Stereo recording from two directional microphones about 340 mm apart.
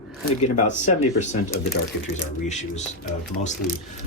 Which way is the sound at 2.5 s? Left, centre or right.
Left.